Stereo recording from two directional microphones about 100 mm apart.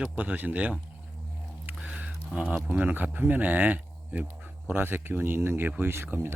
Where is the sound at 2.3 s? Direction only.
15° right (ahead or behind).